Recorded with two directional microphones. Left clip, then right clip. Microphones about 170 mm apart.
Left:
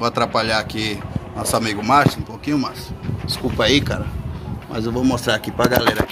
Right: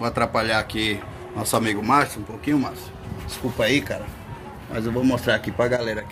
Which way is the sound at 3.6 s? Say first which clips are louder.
Left 4 dB; 20° left (ahead or behind).